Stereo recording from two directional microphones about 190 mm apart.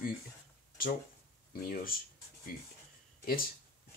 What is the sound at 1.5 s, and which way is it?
Speech, 50° left (ahead or behind).